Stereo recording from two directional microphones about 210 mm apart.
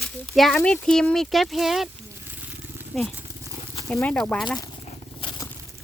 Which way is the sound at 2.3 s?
10° right (ahead or behind).